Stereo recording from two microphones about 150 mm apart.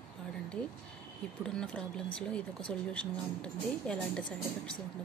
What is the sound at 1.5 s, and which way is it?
A woman's voice, 5° left (ahead or behind).